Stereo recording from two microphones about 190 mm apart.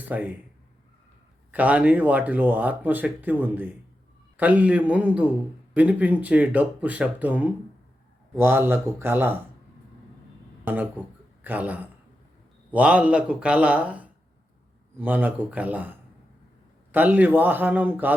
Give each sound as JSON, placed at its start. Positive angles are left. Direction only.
{"t": 0.1, "sound": "speech", "side_deg": -10}
{"t": 1.5, "sound": "speech", "side_deg": -10}
{"t": 10.7, "sound": "speech", "side_deg": -10}